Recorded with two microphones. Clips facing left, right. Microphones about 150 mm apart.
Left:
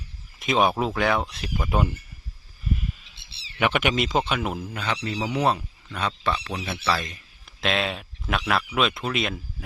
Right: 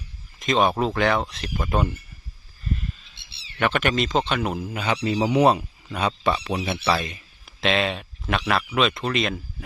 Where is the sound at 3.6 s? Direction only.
10° left (ahead or behind); by 6.8 s 25° right (ahead or behind).